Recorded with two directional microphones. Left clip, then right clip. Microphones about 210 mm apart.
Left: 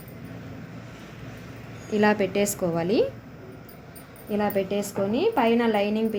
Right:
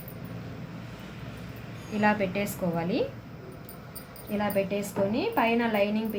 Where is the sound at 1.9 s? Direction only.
55° left (ahead or behind).